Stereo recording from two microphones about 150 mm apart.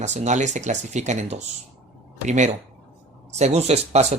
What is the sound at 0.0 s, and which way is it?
Speech, 50° right (ahead or behind).